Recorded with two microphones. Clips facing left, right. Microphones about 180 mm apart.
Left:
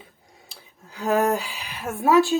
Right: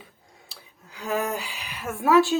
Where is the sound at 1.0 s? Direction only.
55° left (ahead or behind).